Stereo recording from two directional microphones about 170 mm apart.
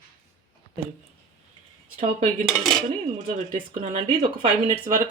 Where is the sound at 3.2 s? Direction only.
45° right (ahead or behind); by 4.8 s 30° right (ahead or behind).